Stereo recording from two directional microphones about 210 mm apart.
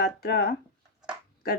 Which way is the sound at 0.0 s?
50° left (ahead or behind).